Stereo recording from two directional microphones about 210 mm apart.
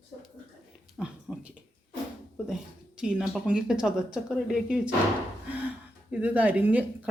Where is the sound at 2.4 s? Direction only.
5° right (ahead or behind).